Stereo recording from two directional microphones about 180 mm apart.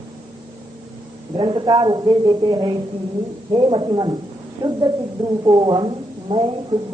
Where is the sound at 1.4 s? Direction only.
25° right (ahead or behind).